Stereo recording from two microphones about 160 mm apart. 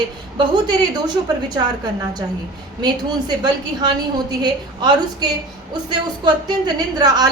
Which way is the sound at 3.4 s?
25° right (ahead or behind).